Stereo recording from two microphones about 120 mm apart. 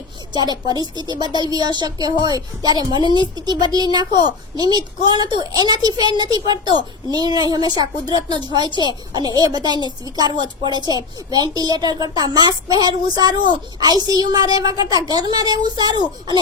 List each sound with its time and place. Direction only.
0.7 s a woman's voice: 35° right (ahead or behind)